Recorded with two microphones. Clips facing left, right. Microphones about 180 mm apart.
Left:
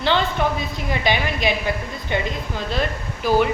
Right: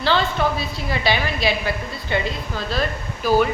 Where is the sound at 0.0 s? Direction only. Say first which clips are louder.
Even; 20° left (ahead or behind).